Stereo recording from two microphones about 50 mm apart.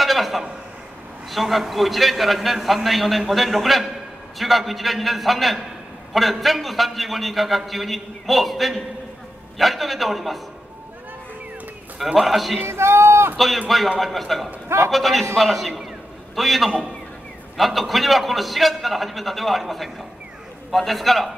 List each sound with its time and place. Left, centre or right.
0.0 s a sound: centre
1.3 s a man's voice: centre
12.1 s a man's voice: centre
12.6 s a man's voice: right
13.9 s a man's voice: centre